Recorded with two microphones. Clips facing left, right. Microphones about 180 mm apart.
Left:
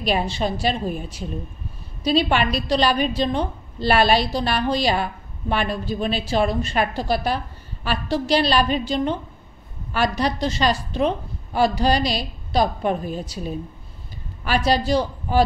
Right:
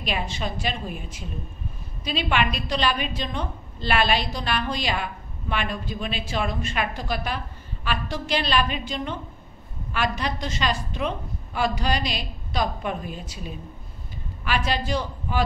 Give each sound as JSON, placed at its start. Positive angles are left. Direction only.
{"t": 0.0, "sound": "a woman's voice", "side_deg": 35}